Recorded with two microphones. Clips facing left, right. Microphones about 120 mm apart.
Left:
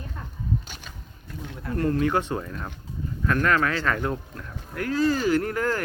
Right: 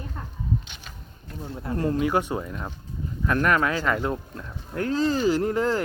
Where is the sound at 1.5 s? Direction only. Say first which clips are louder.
Left 1 dB; 25° right (ahead or behind).